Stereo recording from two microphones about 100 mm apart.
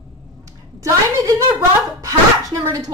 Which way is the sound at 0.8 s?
30° right (ahead or behind).